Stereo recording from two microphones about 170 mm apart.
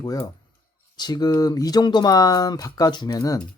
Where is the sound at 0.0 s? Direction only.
20° left (ahead or behind).